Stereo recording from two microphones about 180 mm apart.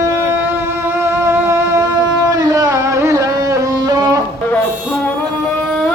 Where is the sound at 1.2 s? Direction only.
15° right (ahead or behind).